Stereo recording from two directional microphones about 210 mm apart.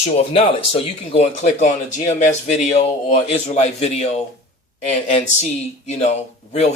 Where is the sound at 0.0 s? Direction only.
30° left (ahead or behind).